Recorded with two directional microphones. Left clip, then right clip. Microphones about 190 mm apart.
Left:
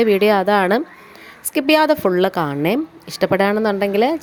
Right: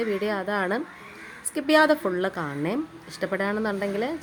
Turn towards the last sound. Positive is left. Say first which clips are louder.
# left 11 dB
turn(degrees=40)  # may be behind; listen again after turning